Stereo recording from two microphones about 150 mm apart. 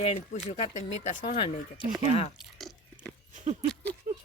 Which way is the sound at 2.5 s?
Centre (ahead or behind).